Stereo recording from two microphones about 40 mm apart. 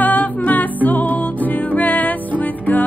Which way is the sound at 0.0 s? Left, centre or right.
Left.